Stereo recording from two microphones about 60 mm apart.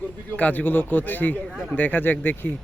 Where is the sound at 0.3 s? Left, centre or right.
Left.